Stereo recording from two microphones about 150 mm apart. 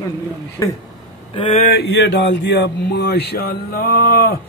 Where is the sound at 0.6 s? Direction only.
20° left (ahead or behind).